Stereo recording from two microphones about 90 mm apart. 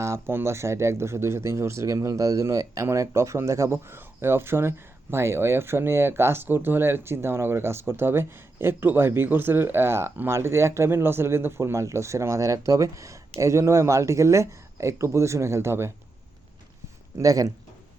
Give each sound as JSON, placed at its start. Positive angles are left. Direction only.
{"t": 0.0, "sound": "speech", "side_deg": -30}
{"t": 17.2, "sound": "speech", "side_deg": -40}